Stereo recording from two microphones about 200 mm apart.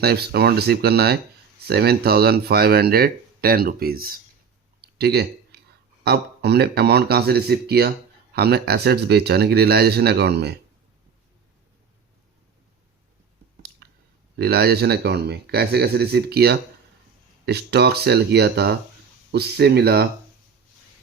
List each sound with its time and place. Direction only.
0.0 s speech: 50° right (ahead or behind)
4.8 s a sound: 55° right (ahead or behind)
6.1 s speech: 55° right (ahead or behind)
13.8 s clicking: 55° right (ahead or behind)
14.3 s speech: 55° right (ahead or behind)